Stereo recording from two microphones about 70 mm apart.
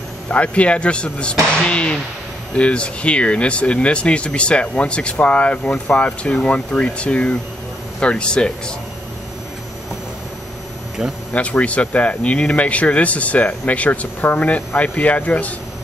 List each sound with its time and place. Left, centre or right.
0.3 s speech: centre
11.3 s speech: centre